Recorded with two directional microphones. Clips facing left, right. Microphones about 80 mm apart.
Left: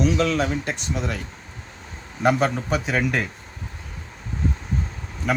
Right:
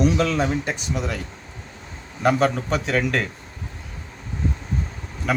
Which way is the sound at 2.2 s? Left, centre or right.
Centre.